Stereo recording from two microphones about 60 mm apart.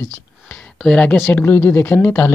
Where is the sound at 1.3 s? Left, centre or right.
Left.